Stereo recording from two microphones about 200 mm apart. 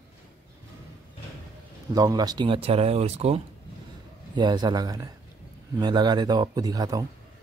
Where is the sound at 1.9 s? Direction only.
20° right (ahead or behind).